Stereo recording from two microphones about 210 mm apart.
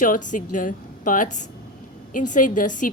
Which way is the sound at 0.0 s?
40° left (ahead or behind).